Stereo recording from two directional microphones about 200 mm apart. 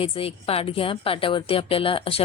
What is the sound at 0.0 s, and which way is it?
A woman's voice, 30° left (ahead or behind).